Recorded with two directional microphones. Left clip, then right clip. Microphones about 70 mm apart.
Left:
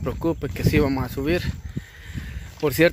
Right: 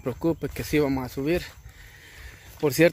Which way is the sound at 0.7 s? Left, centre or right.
Centre.